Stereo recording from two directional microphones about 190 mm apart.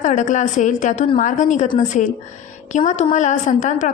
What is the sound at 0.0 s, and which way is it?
A woman's voice, 40° left (ahead or behind).